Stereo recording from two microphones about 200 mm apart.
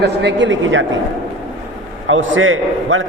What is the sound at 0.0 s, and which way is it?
Speech, 60° right (ahead or behind).